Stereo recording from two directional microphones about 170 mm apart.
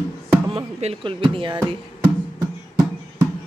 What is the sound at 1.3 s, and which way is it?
Speech, 30° right (ahead or behind).